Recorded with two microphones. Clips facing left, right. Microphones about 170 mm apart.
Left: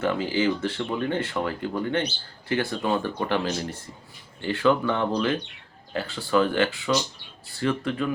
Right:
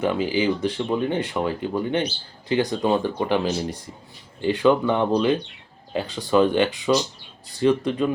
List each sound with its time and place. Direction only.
0.0 s speech: 15° right (ahead or behind)